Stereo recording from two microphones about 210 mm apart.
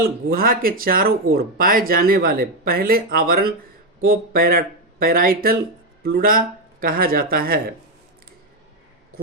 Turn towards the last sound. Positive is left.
turn(degrees=-45)  # may be behind; listen again after turning